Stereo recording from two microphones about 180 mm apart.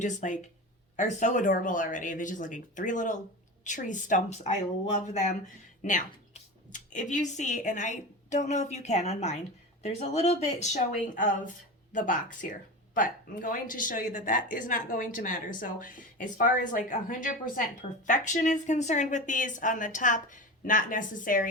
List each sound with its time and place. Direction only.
0.0 s speech: 45° left (ahead or behind)